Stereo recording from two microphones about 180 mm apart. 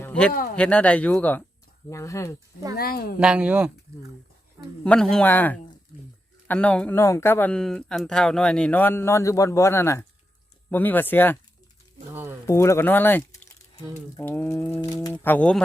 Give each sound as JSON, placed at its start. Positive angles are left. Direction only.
{"t": 0.0, "sound": "a sound", "side_deg": 5}
{"t": 0.5, "sound": "speech", "side_deg": 5}
{"t": 2.7, "sound": "speech", "side_deg": 55}
{"t": 3.2, "sound": "speech", "side_deg": -5}
{"t": 4.8, "sound": "speech", "side_deg": 5}
{"t": 5.9, "sound": "a sound", "side_deg": 10}
{"t": 6.5, "sound": "speech", "side_deg": 5}
{"t": 12.1, "sound": "a sound", "side_deg": -10}
{"t": 12.5, "sound": "speech", "side_deg": 15}